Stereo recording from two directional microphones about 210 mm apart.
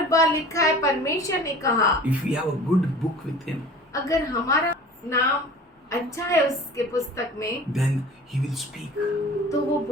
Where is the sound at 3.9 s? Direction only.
15° left (ahead or behind).